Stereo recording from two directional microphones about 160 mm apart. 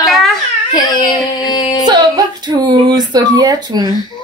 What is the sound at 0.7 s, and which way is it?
Whimper, 25° left (ahead or behind).